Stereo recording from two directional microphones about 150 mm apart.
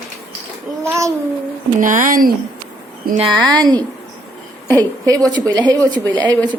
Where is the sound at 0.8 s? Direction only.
20° right (ahead or behind).